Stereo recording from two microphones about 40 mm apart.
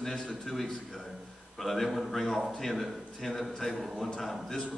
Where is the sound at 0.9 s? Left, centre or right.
Centre.